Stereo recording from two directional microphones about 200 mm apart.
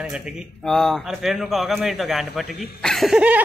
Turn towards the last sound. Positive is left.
turn(degrees=-5)  # may be behind; listen again after turning